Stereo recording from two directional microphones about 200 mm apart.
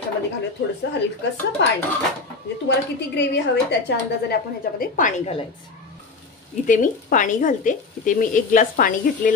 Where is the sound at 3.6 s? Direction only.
55° left (ahead or behind); by 5.3 s 40° left (ahead or behind).